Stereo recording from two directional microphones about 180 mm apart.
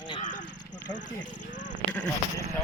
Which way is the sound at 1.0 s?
45° left (ahead or behind).